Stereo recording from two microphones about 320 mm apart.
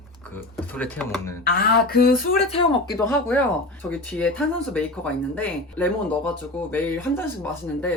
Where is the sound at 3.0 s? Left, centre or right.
Centre.